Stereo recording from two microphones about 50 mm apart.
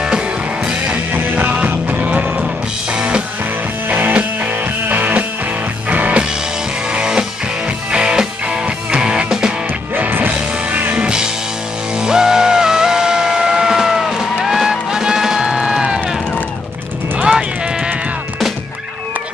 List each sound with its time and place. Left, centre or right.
1.1 s music: right
4.8 s music: right
6.9 s music: centre
9.9 s music: right
10.7 s music: right
12.0 s music: centre
17.2 s a sound: centre